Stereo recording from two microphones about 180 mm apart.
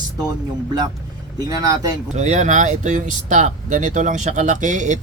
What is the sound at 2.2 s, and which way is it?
Speech, 40° right (ahead or behind).